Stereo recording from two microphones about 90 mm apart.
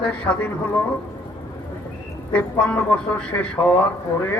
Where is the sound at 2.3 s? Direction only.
15° left (ahead or behind).